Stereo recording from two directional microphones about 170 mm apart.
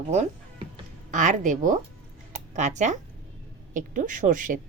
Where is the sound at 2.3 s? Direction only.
45° right (ahead or behind).